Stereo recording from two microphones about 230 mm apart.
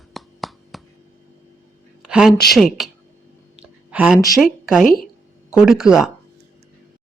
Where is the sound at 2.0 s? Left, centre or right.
Centre.